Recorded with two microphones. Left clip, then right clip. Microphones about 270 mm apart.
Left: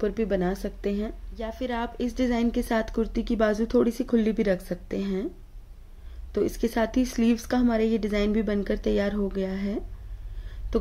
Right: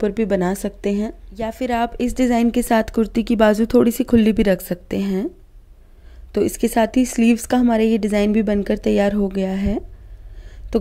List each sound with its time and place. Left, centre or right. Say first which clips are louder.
0.0 s a woman's voice: right 7 dB; right
6.3 s a woman's voice: right 8 dB; right
10.7 s a sound: right 7 dB; right